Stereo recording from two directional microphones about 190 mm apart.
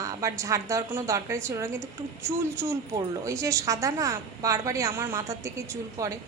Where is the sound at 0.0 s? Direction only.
15° right (ahead or behind).